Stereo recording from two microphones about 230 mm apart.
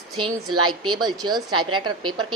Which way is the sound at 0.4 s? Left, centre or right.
Right.